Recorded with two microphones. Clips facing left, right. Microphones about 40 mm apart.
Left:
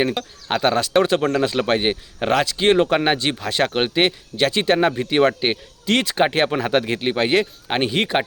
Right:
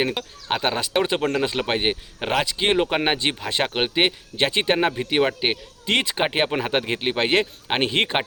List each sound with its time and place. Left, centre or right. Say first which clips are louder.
0.0 s speech: left 3 dB; centre
4.4 s speech: left 3 dB; centre
4.8 s speech: left 4 dB; centre
5.8 s speech: left 4 dB; centre